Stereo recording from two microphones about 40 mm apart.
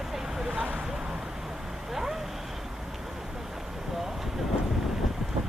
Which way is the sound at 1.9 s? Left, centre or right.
Centre.